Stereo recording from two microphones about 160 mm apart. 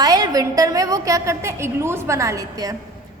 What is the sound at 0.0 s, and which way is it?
A woman's voice, 25° right (ahead or behind).